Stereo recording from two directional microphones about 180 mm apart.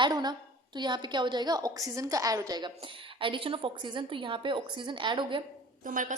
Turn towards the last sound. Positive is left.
turn(degrees=-45)  # may be behind; listen again after turning